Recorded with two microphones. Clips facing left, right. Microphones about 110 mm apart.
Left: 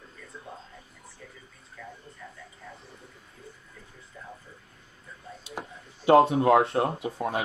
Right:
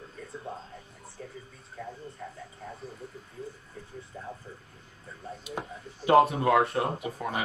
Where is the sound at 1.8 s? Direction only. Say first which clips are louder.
Right 4 dB; 40° right (ahead or behind).